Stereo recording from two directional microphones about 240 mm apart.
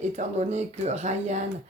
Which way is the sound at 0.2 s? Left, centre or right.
Right.